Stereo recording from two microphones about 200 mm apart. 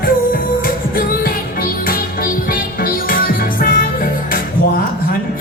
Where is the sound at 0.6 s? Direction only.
45° left (ahead or behind).